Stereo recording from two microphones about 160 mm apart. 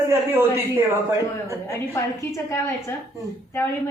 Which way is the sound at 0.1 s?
15° right (ahead or behind).